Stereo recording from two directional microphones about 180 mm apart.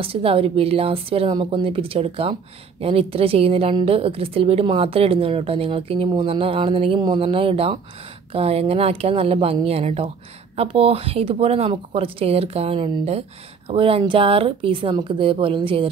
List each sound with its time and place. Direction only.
0.0 s a woman's voice: 30° right (ahead or behind)